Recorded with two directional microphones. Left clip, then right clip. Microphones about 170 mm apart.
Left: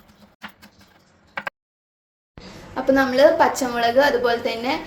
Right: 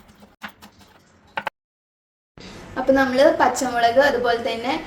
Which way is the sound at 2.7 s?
25° left (ahead or behind).